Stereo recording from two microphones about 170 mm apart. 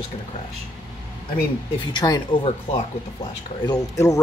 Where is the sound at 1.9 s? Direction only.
25° left (ahead or behind).